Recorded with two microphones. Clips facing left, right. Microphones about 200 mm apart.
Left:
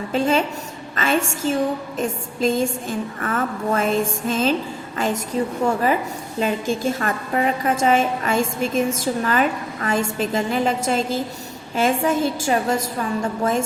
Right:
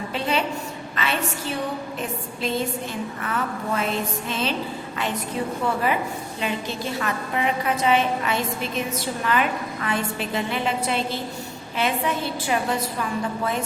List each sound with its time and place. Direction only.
0.1 s a woman's voice: 45° left (ahead or behind)